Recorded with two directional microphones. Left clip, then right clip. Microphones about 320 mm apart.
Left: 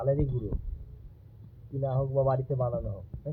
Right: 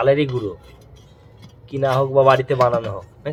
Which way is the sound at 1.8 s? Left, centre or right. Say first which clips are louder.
Right 13 dB; right.